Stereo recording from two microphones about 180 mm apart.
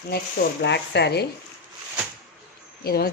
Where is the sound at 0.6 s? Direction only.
70° left (ahead or behind).